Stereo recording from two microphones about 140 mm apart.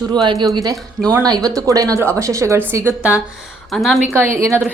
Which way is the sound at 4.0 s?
15° right (ahead or behind).